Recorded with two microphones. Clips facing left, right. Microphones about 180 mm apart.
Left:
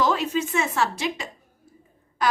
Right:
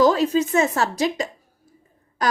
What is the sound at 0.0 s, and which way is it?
A woman's voice, 40° right (ahead or behind).